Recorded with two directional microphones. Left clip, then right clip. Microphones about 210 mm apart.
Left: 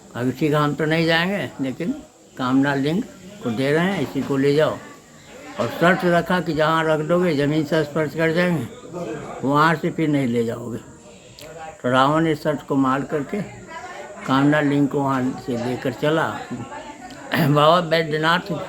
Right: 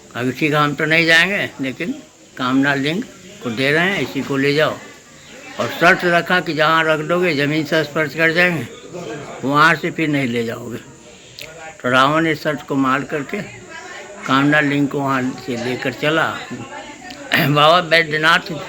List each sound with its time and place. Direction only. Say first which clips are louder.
0.1 s a man's voice: right 3 dB; 15° left (ahead or behind)
5.8 s speech: right 4 dB; 15° left (ahead or behind)
11.8 s a man's voice: right 3 dB; 15° left (ahead or behind)